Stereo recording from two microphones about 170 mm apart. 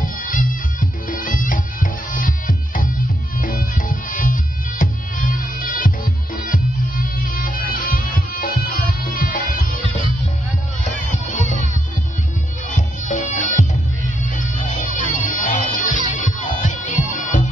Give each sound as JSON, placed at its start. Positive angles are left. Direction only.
{"t": 0.0, "sound": "music", "side_deg": 50}
{"t": 10.8, "sound": "music", "side_deg": 45}
{"t": 12.7, "sound": "music", "side_deg": 45}